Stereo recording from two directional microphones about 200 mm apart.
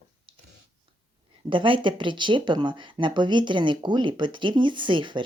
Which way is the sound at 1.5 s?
25° right (ahead or behind).